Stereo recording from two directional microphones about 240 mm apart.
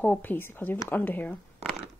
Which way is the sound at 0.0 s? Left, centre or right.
Centre.